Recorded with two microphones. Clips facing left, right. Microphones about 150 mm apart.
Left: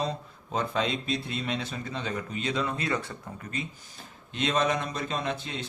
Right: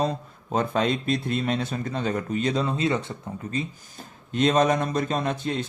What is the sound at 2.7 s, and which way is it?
Speech, 25° right (ahead or behind).